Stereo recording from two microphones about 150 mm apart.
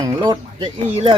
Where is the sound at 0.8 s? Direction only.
45° right (ahead or behind).